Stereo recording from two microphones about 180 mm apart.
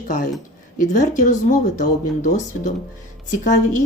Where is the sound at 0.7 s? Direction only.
45° left (ahead or behind).